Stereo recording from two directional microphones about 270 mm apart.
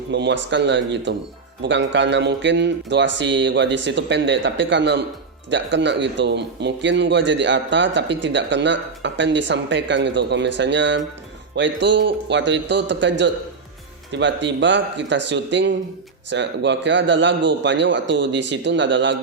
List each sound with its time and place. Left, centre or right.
0.1 s speech: right